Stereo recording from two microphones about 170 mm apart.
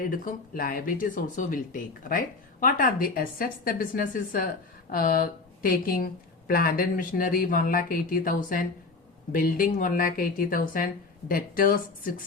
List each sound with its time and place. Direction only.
0.0 s speech: 55° left (ahead or behind)